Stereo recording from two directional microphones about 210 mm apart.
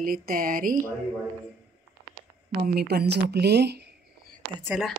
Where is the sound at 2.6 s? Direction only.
45° right (ahead or behind).